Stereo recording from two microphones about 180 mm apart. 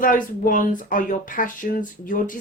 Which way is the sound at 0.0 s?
50° left (ahead or behind).